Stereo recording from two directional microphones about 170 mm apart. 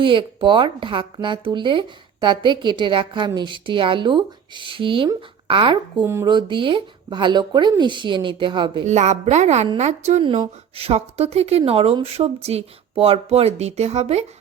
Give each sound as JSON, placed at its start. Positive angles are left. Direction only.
{"t": 0.0, "sound": "a woman's voice", "side_deg": -30}
{"t": 6.0, "sound": "speech", "side_deg": -15}
{"t": 6.2, "sound": "a woman's voice", "side_deg": -30}
{"t": 8.9, "sound": "a woman's voice", "side_deg": -45}